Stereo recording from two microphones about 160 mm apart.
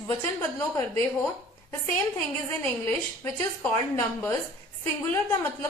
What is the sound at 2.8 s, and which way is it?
A woman's voice, 15° left (ahead or behind).